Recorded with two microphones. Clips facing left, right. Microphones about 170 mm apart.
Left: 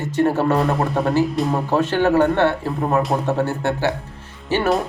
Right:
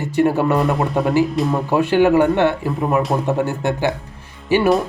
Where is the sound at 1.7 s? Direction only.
10° right (ahead or behind).